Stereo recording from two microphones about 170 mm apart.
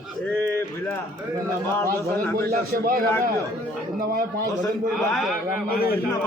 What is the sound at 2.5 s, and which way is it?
Speech, 55° right (ahead or behind).